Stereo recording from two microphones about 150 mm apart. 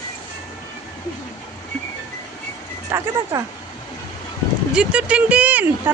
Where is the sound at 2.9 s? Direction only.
20° right (ahead or behind).